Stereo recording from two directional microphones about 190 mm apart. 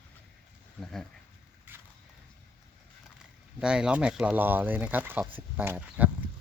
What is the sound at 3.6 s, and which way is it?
Speech, 5° right (ahead or behind).